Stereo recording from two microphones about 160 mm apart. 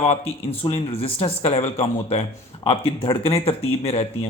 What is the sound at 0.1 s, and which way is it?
Speech, 40° left (ahead or behind).